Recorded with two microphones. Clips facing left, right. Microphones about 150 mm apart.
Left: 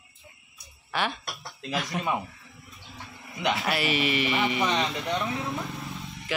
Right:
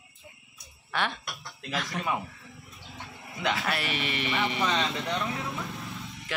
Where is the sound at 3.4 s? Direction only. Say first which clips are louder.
Left 2 dB; 20° left (ahead or behind).